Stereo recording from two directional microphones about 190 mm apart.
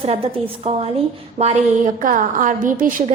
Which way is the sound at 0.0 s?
30° right (ahead or behind).